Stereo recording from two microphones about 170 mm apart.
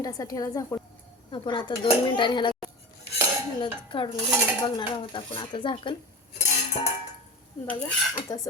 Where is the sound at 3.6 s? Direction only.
30° left (ahead or behind).